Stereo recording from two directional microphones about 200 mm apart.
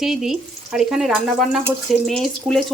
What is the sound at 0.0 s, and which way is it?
Speech, centre (ahead or behind).